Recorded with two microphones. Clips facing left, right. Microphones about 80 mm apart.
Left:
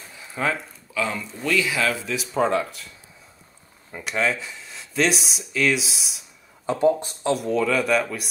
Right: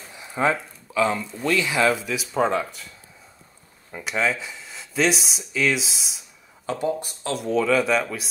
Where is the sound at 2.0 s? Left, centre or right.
Centre.